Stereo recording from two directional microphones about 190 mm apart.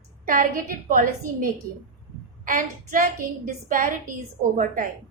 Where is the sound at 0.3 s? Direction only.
45° right (ahead or behind).